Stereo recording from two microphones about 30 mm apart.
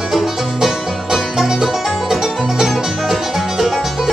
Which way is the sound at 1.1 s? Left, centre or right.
Centre.